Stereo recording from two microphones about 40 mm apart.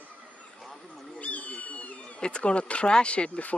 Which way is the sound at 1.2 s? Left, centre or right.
Left.